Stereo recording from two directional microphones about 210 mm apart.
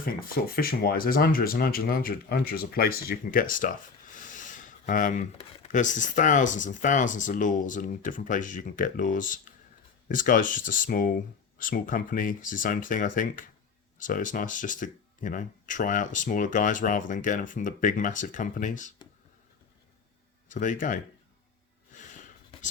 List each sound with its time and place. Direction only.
0.0 s speech: 45° left (ahead or behind)
20.5 s speech: 40° left (ahead or behind)